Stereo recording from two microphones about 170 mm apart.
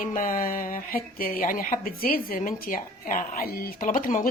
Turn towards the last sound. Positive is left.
turn(degrees=50)  # may be behind; listen again after turning